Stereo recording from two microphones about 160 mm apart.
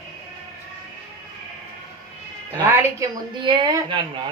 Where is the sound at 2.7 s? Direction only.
15° right (ahead or behind).